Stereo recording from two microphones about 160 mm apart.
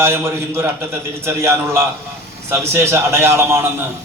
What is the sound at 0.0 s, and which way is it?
A man's voice, 15° right (ahead or behind).